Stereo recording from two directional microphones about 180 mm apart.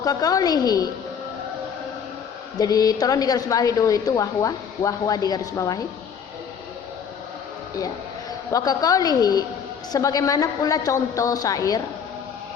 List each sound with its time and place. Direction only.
0.0 s a woman's voice: 20° left (ahead or behind)
2.6 s a woman's voice: 20° left (ahead or behind)
8.5 s a woman's voice: 20° left (ahead or behind)